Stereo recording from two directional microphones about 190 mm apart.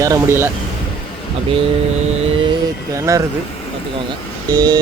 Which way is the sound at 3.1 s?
15° right (ahead or behind).